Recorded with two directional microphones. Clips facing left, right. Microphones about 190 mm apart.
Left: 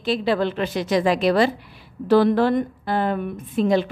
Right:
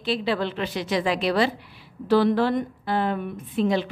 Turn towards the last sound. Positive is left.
turn(degrees=45)  # may be behind; listen again after turning